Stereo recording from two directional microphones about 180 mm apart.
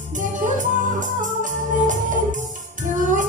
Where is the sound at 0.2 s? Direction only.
45° right (ahead or behind).